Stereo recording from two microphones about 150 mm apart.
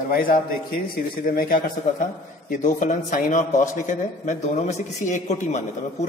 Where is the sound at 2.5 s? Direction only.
55° left (ahead or behind).